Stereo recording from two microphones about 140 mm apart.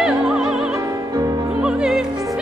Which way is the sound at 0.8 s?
25° right (ahead or behind).